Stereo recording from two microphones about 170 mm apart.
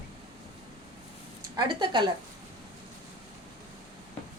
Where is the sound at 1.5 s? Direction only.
25° right (ahead or behind).